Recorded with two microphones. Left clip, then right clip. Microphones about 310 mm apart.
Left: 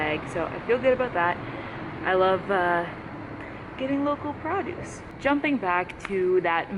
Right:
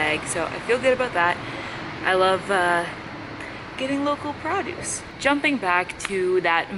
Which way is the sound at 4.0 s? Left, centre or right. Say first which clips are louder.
Right 3 dB; left.